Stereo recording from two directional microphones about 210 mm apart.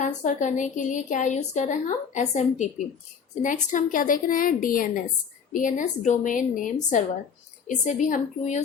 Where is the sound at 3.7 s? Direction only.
40° left (ahead or behind).